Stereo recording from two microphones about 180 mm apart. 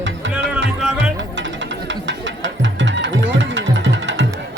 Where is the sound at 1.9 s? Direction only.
90° right.